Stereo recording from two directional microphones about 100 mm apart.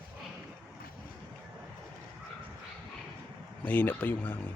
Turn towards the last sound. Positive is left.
turn(degrees=20)  # may be behind; listen again after turning